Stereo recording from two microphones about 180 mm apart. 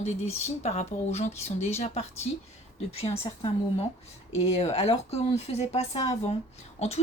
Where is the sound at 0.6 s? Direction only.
35° left (ahead or behind).